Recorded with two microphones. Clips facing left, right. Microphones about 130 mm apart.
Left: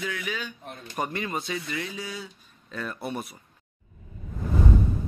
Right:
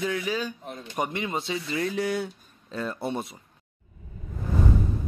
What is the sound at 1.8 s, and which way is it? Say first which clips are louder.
Speech: right 8 dB; 60° right (ahead or behind).